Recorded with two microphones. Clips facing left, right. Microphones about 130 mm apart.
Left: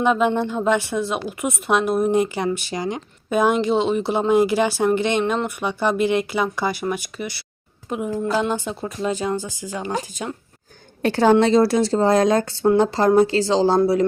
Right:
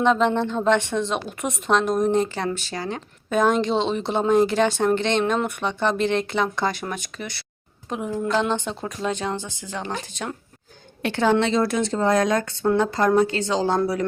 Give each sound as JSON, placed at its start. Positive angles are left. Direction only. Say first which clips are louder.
{"t": 0.0, "sound": "a woman's voice", "louder": "left 1 dB", "side_deg": 10}
{"t": 11.0, "sound": "a woman's voice", "louder": "left 5 dB", "side_deg": 40}